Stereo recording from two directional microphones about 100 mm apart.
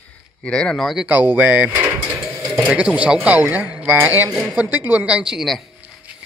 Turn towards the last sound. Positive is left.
turn(degrees=0)  # may be behind; listen again after turning